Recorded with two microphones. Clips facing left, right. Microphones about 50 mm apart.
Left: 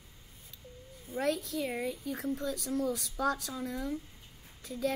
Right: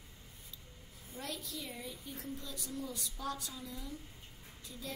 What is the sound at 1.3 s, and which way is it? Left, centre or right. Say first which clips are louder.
Speech: left 10 dB; left.